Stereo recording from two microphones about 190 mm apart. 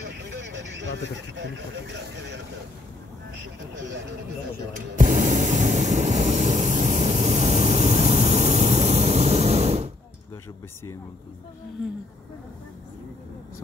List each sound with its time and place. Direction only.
0.5 s vehicle: 75° right (ahead or behind)
1.3 s speech: 70° right (ahead or behind)
3.7 s speech: 75° right (ahead or behind)
4.9 s spray: 40° right (ahead or behind)
11.8 s speech: centre (ahead or behind)